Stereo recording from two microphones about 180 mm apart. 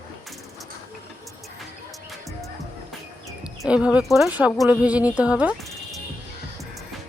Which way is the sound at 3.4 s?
5° right (ahead or behind).